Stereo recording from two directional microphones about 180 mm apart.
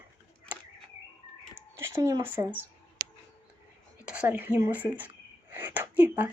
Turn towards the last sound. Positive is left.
turn(degrees=-10)  # may be behind; listen again after turning